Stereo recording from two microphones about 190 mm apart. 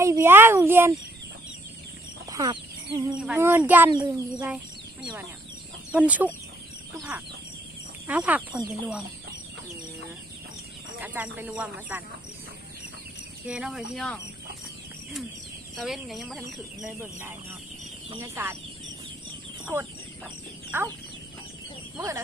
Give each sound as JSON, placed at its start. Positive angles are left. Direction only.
{"t": 0.0, "sound": "speech", "side_deg": -15}
{"t": 2.3, "sound": "speech", "side_deg": -20}
{"t": 3.2, "sound": "speech", "side_deg": -10}
{"t": 5.9, "sound": "speech", "side_deg": -5}
{"t": 8.0, "sound": "speech", "side_deg": -5}
{"t": 11.0, "sound": "speech", "side_deg": -10}
{"t": 13.5, "sound": "speech", "side_deg": -5}
{"t": 15.7, "sound": "speech", "side_deg": 0}
{"t": 17.0, "sound": "speech", "side_deg": -10}
{"t": 20.7, "sound": "chicken", "side_deg": -10}
{"t": 21.9, "sound": "speech", "side_deg": -15}